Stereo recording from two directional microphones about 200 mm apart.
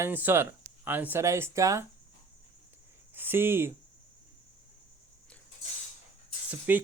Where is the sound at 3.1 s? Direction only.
10° right (ahead or behind).